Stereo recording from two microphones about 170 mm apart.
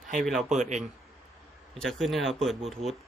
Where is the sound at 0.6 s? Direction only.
45° right (ahead or behind).